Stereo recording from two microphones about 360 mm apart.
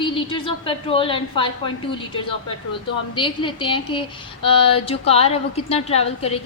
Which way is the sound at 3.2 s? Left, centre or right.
Centre.